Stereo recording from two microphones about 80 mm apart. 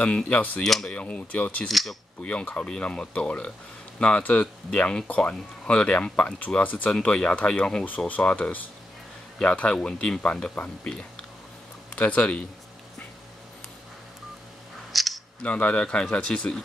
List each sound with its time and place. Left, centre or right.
0.0 s speech: centre
0.7 s speech: centre
0.9 s speech: centre
1.7 s speech: centre
2.2 s speech: centre
14.9 s camera: centre
15.4 s speech: centre